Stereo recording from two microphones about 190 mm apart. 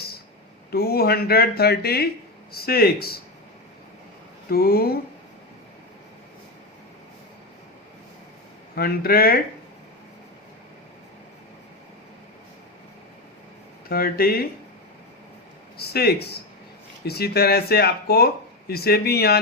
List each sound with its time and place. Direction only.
0.7 s speech: 55° left (ahead or behind)
4.4 s speech: 50° left (ahead or behind)
8.7 s speech: 50° left (ahead or behind)
13.9 s speech: 50° left (ahead or behind)
15.8 s speech: 55° left (ahead or behind)